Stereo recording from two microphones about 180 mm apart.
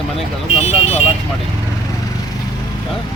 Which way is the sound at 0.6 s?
35° left (ahead or behind).